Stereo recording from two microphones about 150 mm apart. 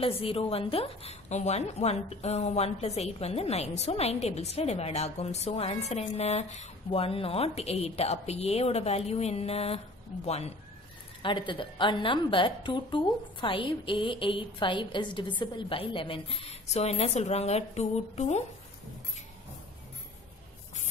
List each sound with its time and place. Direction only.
0.0 s a woman's voice: 40° left (ahead or behind)
11.2 s a woman's voice: 35° left (ahead or behind); by 18.4 s 50° left (ahead or behind)